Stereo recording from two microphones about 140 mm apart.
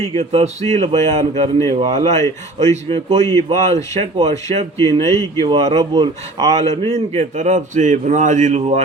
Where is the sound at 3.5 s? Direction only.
50° right (ahead or behind).